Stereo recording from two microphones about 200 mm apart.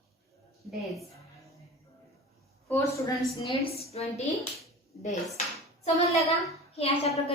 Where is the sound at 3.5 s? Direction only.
30° left (ahead or behind).